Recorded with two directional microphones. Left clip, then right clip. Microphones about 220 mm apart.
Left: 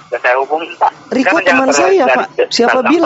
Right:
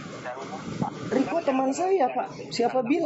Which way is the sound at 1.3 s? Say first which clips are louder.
Left 19 dB; 40° left (ahead or behind).